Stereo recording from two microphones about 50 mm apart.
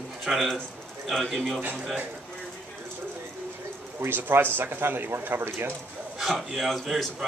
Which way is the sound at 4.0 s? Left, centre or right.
Right.